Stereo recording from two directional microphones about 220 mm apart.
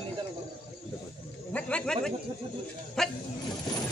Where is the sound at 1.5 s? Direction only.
5° left (ahead or behind).